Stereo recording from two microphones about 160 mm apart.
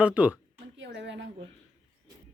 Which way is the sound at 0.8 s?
90° right.